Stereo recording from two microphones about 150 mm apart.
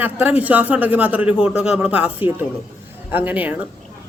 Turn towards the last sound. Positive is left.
turn(degrees=-10)  # may be behind; listen again after turning